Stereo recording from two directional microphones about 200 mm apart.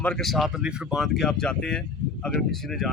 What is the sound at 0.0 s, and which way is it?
Speech, 5° left (ahead or behind).